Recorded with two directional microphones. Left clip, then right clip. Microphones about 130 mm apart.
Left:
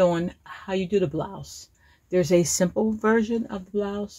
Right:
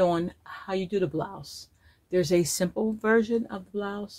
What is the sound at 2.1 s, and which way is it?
Speech, 30° left (ahead or behind).